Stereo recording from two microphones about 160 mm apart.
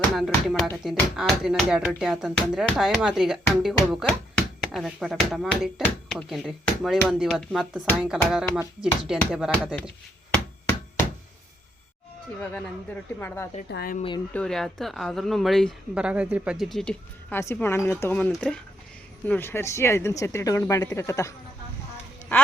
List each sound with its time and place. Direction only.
0.2 s a woman's voice: centre (ahead or behind)
12.4 s speech: 10° left (ahead or behind)
13.7 s speech: 80° left
14.3 s a woman's voice: 5° left (ahead or behind)